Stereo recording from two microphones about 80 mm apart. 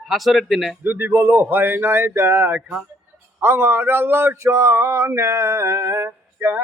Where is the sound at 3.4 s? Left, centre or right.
Right.